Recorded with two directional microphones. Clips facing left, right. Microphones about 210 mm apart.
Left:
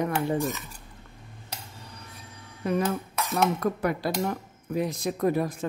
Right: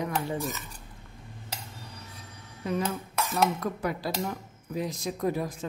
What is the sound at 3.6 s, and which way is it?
Speech, 60° left (ahead or behind).